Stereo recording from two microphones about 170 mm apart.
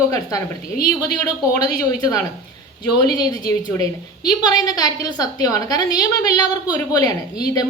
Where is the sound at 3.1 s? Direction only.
25° left (ahead or behind).